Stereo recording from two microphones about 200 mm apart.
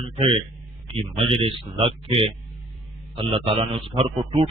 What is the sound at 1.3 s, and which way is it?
Speech, 25° right (ahead or behind).